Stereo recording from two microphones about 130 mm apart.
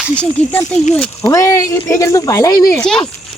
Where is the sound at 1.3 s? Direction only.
25° left (ahead or behind).